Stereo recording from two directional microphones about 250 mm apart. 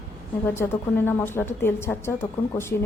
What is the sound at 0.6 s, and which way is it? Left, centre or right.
Speech, centre.